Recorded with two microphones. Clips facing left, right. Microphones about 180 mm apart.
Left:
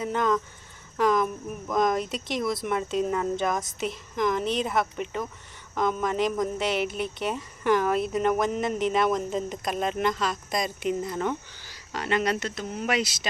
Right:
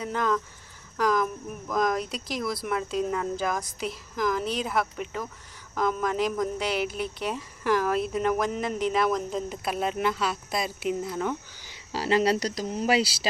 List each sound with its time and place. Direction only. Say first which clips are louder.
0.0 s speech: left 2 dB; centre (ahead or behind)
11.9 s speech: right 3 dB; 30° right (ahead or behind)